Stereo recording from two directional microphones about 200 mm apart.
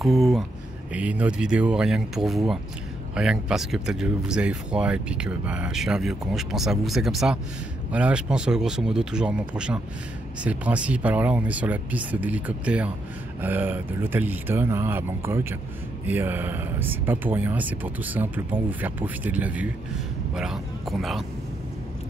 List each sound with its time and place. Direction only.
0.0 s speech: centre (ahead or behind)